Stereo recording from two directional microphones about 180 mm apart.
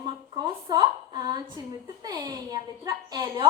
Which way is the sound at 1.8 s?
20° right (ahead or behind).